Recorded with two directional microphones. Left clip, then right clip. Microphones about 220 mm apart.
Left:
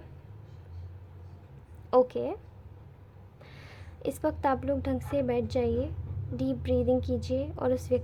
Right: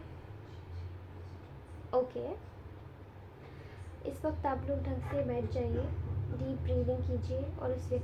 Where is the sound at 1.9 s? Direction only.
40° left (ahead or behind).